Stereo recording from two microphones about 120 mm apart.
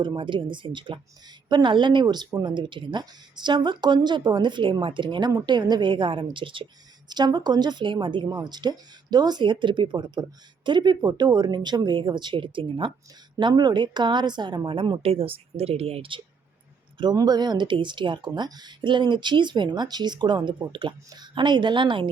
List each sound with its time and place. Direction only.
0.0 s a woman's voice: 40° right (ahead or behind)
15.0 s speech: 55° right (ahead or behind)
17.0 s speech: 35° right (ahead or behind)